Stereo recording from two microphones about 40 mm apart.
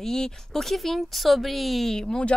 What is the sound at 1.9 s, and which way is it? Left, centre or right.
Speech, centre.